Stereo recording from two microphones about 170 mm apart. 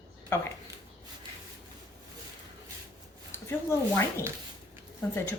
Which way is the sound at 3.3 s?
15° left (ahead or behind).